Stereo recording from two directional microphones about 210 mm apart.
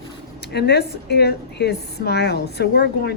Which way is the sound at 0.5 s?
50° left (ahead or behind).